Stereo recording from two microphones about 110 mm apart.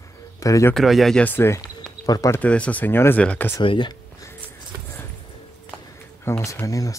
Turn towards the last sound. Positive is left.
turn(degrees=30)  # may be behind; listen again after turning